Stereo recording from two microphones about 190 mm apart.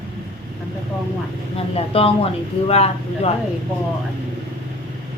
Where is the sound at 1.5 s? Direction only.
30° left (ahead or behind).